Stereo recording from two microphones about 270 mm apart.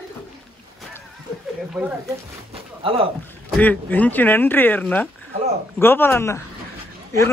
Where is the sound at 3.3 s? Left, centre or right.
Centre.